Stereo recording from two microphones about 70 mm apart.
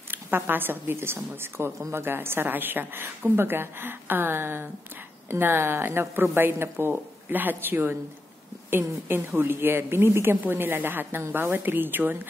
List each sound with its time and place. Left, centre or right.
0.1 s a woman's voice: right